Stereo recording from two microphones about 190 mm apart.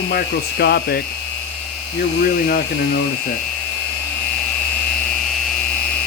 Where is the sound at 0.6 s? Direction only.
55° left (ahead or behind).